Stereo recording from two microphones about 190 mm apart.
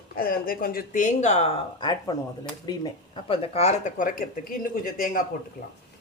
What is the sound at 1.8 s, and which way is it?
Speech, 25° left (ahead or behind).